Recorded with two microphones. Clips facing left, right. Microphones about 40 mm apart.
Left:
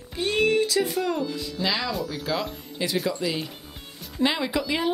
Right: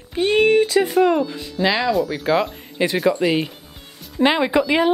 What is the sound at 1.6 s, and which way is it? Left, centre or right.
Speech, right.